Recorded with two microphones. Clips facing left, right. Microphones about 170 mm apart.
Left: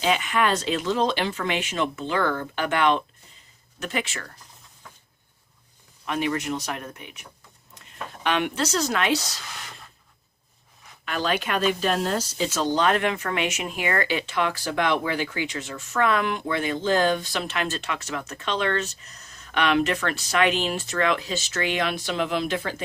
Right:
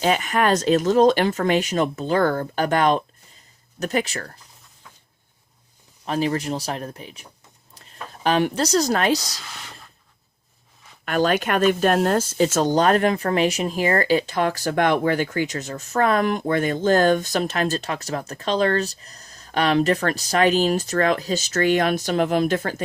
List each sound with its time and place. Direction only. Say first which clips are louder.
0.0 s speech: right 3 dB; 45° right (ahead or behind)
6.1 s speech: right 3 dB; 35° right (ahead or behind)
11.0 s speech: right 6 dB; 45° right (ahead or behind)